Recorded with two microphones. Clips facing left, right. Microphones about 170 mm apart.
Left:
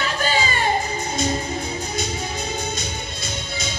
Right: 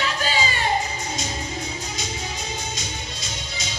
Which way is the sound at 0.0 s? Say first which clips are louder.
Left 2 dB; 50° left (ahead or behind).